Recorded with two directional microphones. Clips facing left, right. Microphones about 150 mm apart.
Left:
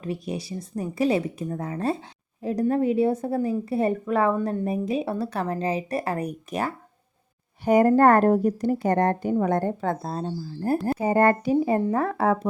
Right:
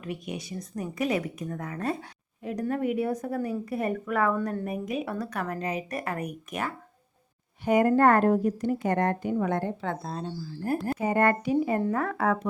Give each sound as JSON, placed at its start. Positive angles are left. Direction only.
{"t": 0.0, "sound": "a woman's voice", "side_deg": 30}